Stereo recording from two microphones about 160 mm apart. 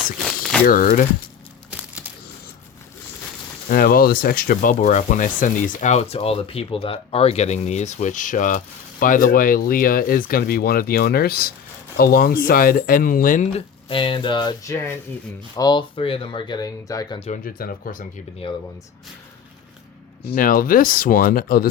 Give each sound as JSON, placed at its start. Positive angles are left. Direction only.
{"t": 0.6, "sound": "speech", "side_deg": 60}
{"t": 3.7, "sound": "speech", "side_deg": 65}
{"t": 13.8, "sound": "speech", "side_deg": 35}
{"t": 17.2, "sound": "speech", "side_deg": 40}
{"t": 17.4, "sound": "speech", "side_deg": 65}
{"t": 18.4, "sound": "speech", "side_deg": 35}
{"t": 20.3, "sound": "speech", "side_deg": 60}